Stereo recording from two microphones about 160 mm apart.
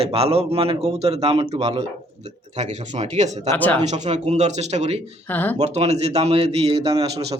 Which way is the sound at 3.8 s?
45° right (ahead or behind).